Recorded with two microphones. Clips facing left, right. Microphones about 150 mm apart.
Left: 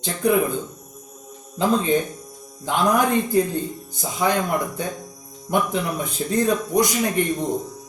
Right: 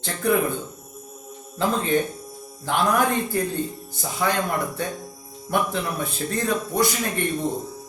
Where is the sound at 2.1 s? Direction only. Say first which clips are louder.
Right 1 dB; 5° right (ahead or behind).